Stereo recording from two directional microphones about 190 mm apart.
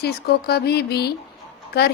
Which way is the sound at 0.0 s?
55° left (ahead or behind).